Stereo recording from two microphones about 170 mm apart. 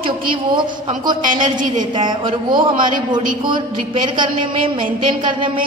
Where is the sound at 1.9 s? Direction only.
25° right (ahead or behind).